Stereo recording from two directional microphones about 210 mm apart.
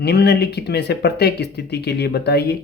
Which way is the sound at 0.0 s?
50° left (ahead or behind).